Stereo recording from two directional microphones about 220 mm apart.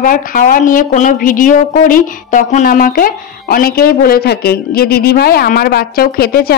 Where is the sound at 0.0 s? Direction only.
40° left (ahead or behind).